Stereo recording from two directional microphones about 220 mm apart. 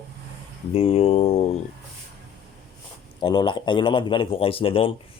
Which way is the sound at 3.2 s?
20° left (ahead or behind).